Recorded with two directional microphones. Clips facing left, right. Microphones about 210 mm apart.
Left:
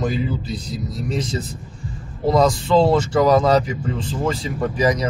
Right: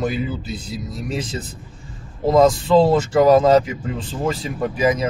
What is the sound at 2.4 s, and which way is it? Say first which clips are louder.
Speech: right 3 dB; 5° right (ahead or behind).